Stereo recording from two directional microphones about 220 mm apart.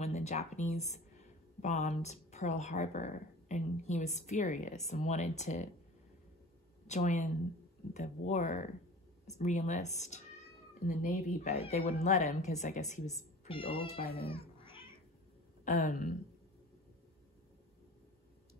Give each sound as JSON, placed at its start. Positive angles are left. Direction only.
{"t": 0.0, "sound": "speech", "side_deg": 30}
{"t": 6.9, "sound": "speech", "side_deg": 35}
{"t": 13.9, "sound": "speech", "side_deg": 45}
{"t": 14.2, "sound": "cat", "side_deg": 25}
{"t": 15.6, "sound": "speech", "side_deg": 40}